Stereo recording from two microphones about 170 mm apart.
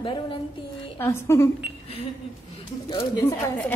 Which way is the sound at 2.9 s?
20° left (ahead or behind).